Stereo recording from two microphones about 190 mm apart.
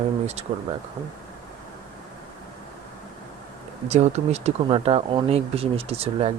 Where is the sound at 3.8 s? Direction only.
35° right (ahead or behind).